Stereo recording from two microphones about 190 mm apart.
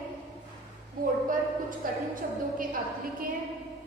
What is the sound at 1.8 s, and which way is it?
Speech, 45° right (ahead or behind).